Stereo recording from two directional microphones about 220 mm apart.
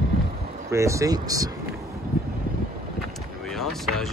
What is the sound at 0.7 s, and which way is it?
Speech, 15° right (ahead or behind).